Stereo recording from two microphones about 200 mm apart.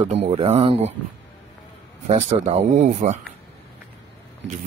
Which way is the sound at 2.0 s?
35° right (ahead or behind).